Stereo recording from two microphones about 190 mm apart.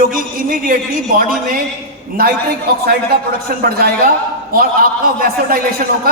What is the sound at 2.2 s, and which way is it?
Speech, 50° right (ahead or behind).